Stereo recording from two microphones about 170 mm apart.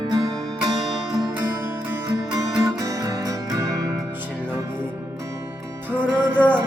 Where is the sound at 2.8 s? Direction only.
20° right (ahead or behind).